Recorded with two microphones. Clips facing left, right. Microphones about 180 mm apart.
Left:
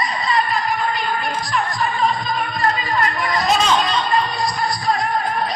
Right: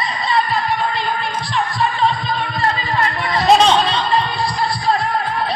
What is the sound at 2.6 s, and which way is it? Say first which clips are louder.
Music: even; 30° right (ahead or behind).